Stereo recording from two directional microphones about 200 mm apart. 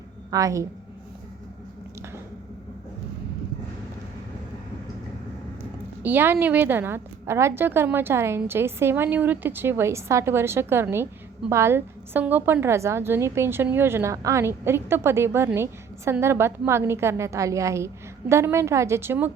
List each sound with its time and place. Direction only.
0.3 s a woman's voice: 15° right (ahead or behind)
6.0 s a woman's voice: 10° right (ahead or behind)